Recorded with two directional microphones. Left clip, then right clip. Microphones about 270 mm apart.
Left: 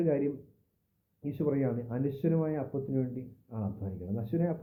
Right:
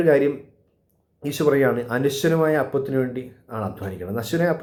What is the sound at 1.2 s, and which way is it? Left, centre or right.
Speech, centre.